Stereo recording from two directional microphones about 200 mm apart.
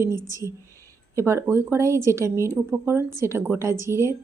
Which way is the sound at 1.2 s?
15° right (ahead or behind).